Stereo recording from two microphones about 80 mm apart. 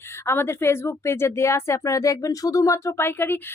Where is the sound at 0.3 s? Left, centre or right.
Left.